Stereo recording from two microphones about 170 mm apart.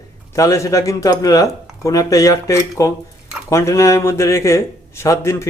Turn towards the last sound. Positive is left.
turn(degrees=15)  # may be behind; listen again after turning